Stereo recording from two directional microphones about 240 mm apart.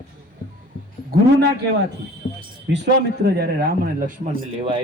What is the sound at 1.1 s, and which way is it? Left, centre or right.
Speech, right.